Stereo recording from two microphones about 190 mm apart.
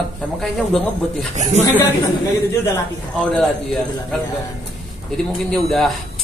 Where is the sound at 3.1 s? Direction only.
5° left (ahead or behind).